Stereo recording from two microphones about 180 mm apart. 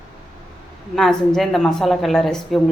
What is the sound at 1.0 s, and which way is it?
Speech, centre (ahead or behind).